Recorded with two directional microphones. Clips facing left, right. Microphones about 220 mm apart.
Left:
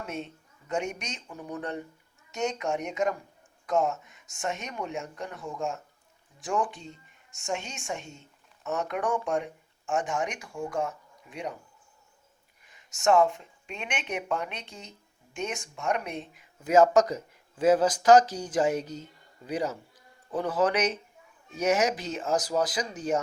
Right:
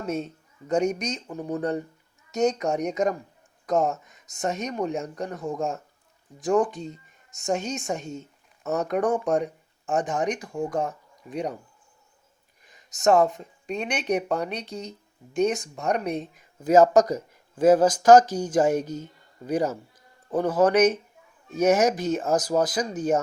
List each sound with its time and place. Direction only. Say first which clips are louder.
0.0 s a woman's voice: right 7 dB; 40° right (ahead or behind)
12.6 s speech: right 4 dB; 40° right (ahead or behind)